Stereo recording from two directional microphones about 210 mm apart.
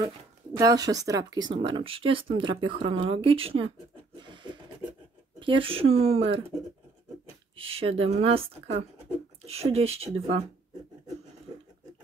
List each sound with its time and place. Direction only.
0.0 s speech: 15° right (ahead or behind)
4.2 s a sound: 20° right (ahead or behind)
5.4 s speech: 25° right (ahead or behind)
7.5 s speech: 25° right (ahead or behind)
9.5 s speech: 30° right (ahead or behind)